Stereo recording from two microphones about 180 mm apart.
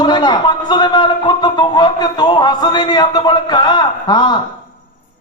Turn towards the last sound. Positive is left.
turn(degrees=25)  # may be behind; listen again after turning